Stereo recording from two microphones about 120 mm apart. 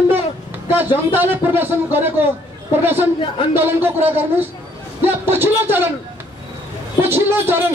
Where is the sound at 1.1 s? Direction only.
15° right (ahead or behind).